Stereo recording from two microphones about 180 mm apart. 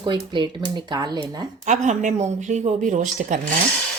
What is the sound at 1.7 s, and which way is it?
Speech, 45° right (ahead or behind).